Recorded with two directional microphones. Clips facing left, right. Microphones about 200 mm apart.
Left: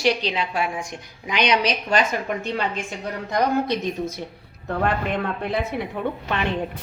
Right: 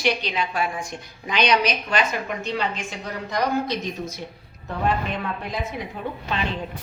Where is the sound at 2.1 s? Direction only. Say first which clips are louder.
Left 2 dB; 50° left (ahead or behind).